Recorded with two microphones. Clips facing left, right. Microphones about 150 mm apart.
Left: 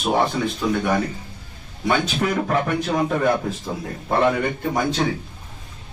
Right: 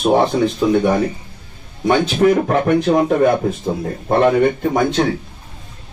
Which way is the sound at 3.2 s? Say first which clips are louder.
Right 6 dB; 50° right (ahead or behind).